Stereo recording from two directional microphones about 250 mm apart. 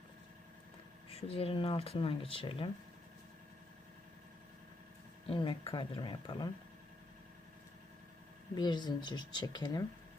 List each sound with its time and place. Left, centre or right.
1.1 s speech: left
5.3 s speech: left
8.5 s speech: centre